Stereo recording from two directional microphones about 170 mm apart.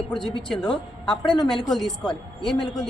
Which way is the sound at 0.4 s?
5° left (ahead or behind).